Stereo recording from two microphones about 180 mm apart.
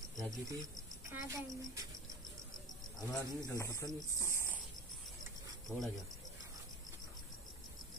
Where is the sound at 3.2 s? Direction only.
20° left (ahead or behind).